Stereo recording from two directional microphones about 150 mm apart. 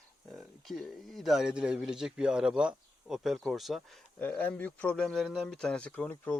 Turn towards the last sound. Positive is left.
turn(degrees=10)  # may be behind; listen again after turning